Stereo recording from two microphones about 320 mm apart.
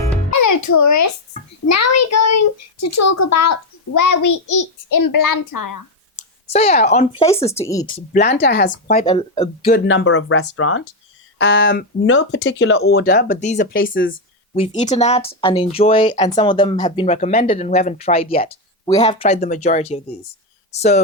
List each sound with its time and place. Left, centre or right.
0.3 s music: left
1.6 s a child's voice: left
6.5 s speech: centre
9.0 s speech: centre
9.6 s speech: left
14.5 s speech: centre